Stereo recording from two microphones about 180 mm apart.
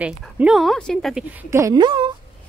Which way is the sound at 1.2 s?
10° right (ahead or behind).